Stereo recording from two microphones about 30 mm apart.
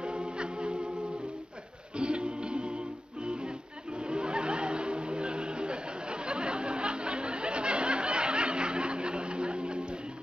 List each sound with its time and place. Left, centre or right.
0.0 s music: right
2.0 s music: right
4.0 s a sound: right